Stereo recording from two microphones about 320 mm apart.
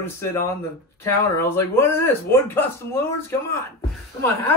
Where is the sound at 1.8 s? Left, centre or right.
Centre.